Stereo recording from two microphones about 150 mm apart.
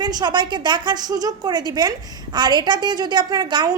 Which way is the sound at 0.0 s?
30° right (ahead or behind).